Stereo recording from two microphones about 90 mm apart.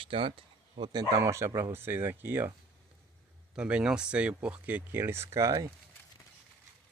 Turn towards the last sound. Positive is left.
turn(degrees=-40)  # may be behind; listen again after turning